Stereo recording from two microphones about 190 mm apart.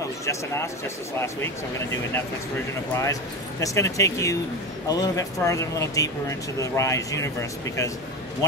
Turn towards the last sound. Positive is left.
turn(degrees=15)  # may be behind; listen again after turning